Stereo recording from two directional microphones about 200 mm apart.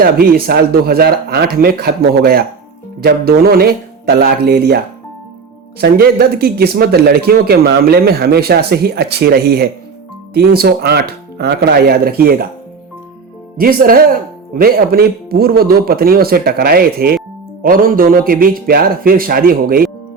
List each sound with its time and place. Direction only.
0.0 s speech: 50° right (ahead or behind)
5.8 s speech: 50° right (ahead or behind)
13.6 s speech: 45° right (ahead or behind)